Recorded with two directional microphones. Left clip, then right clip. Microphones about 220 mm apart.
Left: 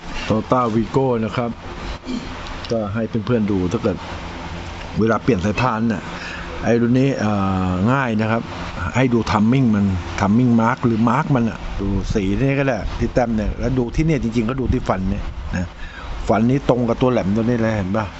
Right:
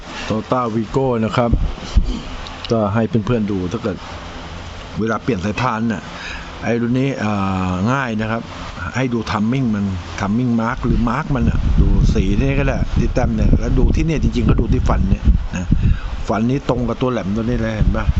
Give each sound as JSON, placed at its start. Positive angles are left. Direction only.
{"t": 0.3, "sound": "speech", "side_deg": 0}
{"t": 2.6, "sound": "speech", "side_deg": -30}
{"t": 3.3, "sound": "speech", "side_deg": 0}
{"t": 4.9, "sound": "speech", "side_deg": 5}
{"t": 16.2, "sound": "speech", "side_deg": 0}